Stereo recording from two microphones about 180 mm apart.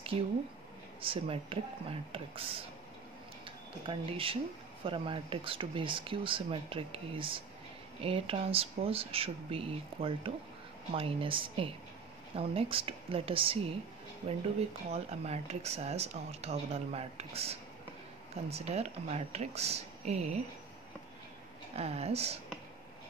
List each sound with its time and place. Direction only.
1.0 s speech: 30° right (ahead or behind)
3.8 s speech: 30° right (ahead or behind)
14.9 s speech: 35° right (ahead or behind)
21.7 s speech: 35° right (ahead or behind)